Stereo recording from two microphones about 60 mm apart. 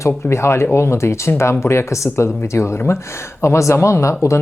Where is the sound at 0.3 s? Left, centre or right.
Left.